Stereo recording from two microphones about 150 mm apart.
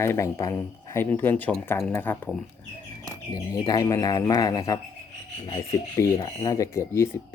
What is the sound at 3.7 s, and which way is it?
Speech, 25° left (ahead or behind).